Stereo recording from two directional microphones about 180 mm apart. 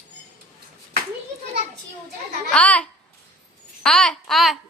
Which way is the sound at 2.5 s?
5° left (ahead or behind).